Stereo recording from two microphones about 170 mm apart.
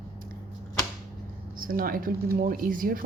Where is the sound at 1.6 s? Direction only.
55° right (ahead or behind).